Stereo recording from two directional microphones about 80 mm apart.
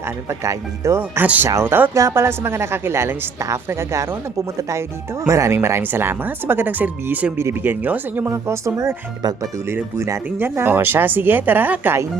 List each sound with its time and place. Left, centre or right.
0.3 s a woman's voice: right
1.2 s speech: right
2.0 s a woman's voice: right
8.2 s a woman's voice: right